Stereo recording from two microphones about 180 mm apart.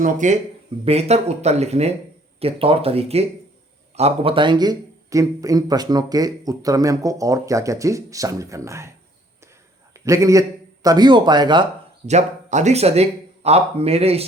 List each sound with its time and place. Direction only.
0.0 s speech: 45° right (ahead or behind); by 8.9 s 15° right (ahead or behind)
9.9 s a man's voice: 15° right (ahead or behind)
12.0 s speech: 40° right (ahead or behind)